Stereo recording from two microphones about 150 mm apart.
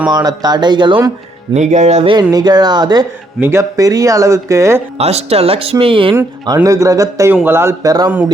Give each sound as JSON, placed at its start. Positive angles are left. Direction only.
{"t": 0.1, "sound": "speech", "side_deg": -25}
{"t": 1.5, "sound": "speech", "side_deg": -50}
{"t": 2.3, "sound": "speech", "side_deg": -25}
{"t": 4.9, "sound": "speech", "side_deg": -45}